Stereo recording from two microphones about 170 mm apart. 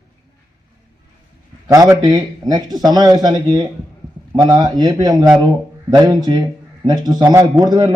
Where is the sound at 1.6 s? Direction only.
20° right (ahead or behind).